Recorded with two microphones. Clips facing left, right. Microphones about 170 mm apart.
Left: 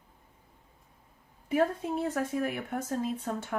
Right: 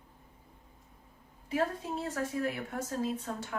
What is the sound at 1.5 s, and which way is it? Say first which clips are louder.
A woman's voice: left 5 dB; 55° left (ahead or behind).